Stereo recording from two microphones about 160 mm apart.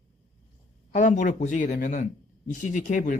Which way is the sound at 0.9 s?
50° left (ahead or behind).